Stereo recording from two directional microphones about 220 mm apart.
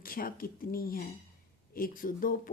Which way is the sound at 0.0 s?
40° left (ahead or behind).